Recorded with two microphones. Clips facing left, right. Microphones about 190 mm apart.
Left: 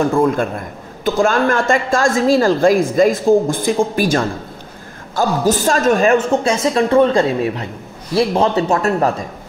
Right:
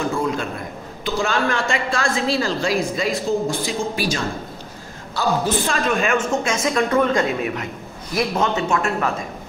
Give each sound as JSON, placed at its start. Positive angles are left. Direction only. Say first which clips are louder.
{"t": 0.0, "sound": "a woman's voice", "louder": "left 8 dB", "side_deg": 50}